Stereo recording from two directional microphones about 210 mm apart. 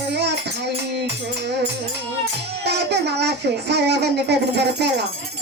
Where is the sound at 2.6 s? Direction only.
55° right (ahead or behind).